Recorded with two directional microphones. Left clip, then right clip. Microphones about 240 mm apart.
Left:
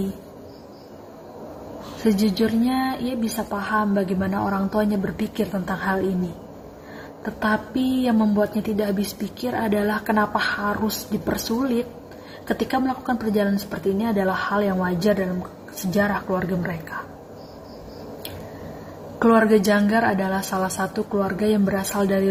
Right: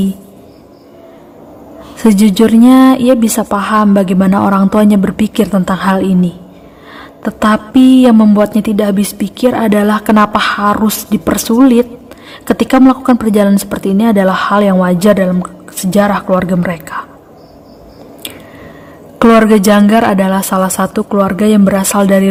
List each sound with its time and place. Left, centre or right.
2.0 s a woman's voice: right
19.4 s a woman's voice: right